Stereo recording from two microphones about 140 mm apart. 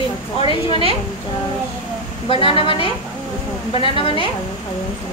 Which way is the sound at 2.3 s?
40° left (ahead or behind).